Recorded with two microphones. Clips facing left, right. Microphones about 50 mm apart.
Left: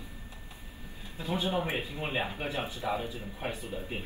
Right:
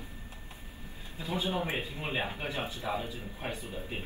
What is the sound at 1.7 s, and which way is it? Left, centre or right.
Speech, left.